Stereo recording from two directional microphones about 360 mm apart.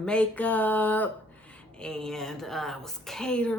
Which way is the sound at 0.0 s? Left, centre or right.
Centre.